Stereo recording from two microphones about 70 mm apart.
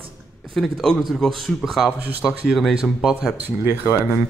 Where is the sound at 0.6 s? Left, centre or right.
Centre.